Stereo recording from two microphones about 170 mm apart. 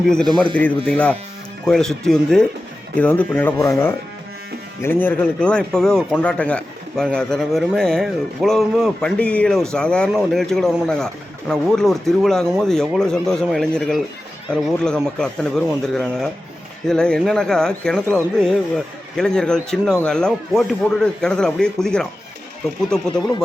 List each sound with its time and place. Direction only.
0.0 s speech: 5° left (ahead or behind)